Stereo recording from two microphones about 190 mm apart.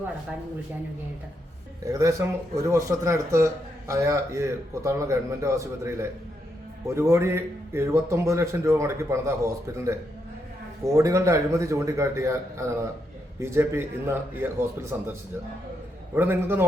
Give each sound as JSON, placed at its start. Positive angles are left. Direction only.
{"t": 1.9, "sound": "speech", "side_deg": -15}
{"t": 16.1, "sound": "speech", "side_deg": -10}